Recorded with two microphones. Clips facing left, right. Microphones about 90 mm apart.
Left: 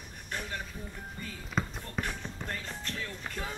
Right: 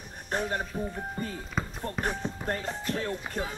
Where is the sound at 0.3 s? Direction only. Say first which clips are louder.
Right 8 dB; 40° right (ahead or behind).